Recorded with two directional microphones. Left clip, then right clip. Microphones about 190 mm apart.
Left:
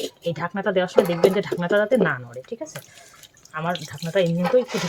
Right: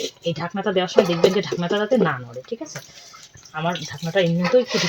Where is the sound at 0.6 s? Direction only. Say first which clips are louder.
Right 1 dB; 30° right (ahead or behind).